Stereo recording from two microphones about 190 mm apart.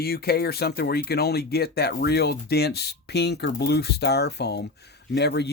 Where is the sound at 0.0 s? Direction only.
55° left (ahead or behind).